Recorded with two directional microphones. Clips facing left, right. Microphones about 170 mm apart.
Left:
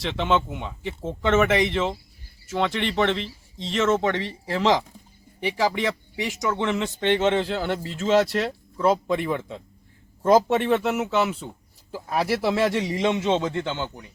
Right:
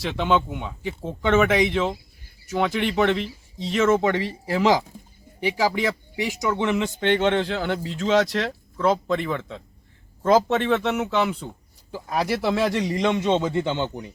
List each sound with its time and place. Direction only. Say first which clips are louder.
0.0 s speech: right 1 dB; centre (ahead or behind)
13.5 s speech: right 4 dB; 10° right (ahead or behind)